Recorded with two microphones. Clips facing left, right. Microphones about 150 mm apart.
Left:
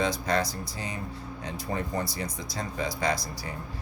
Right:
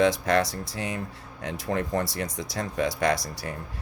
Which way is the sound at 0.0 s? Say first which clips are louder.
Right 5 dB; 80° right.